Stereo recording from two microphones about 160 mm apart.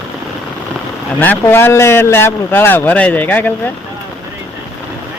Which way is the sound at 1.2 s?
10° left (ahead or behind).